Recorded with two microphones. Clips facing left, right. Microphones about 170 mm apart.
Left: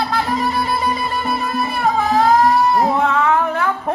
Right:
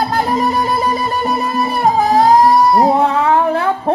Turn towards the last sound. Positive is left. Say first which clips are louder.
# right 4 dB
turn(degrees=-30)  # may be behind; listen again after turning